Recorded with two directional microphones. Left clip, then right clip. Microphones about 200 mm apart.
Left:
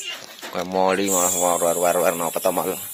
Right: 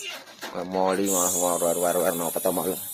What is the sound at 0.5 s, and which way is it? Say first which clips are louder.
Speech: left 4 dB; 15° left (ahead or behind).